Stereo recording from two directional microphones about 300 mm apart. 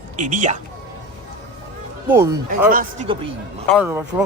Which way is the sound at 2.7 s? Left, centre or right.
Right.